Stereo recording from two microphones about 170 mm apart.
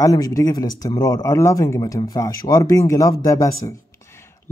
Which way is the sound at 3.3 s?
20° left (ahead or behind).